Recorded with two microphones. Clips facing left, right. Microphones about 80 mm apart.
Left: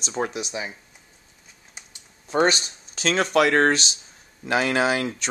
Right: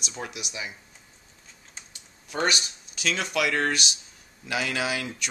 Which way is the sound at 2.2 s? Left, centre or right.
Left.